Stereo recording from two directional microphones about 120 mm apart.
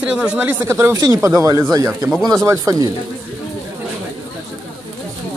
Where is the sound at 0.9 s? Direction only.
35° right (ahead or behind).